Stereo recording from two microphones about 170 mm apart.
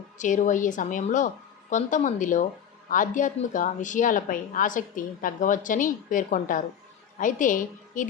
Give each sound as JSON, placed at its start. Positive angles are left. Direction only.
{"t": 0.2, "sound": "a woman's voice", "side_deg": 45}